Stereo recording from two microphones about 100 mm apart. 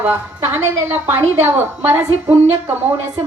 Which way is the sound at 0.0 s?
20° right (ahead or behind).